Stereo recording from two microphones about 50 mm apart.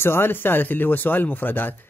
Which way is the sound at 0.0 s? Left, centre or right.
Left.